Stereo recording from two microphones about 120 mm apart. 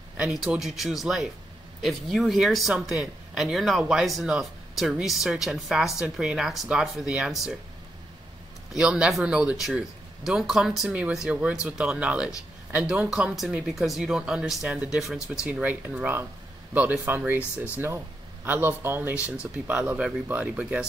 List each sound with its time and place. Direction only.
0.2 s speech: 5° right (ahead or behind)
8.7 s speech: 5° right (ahead or behind)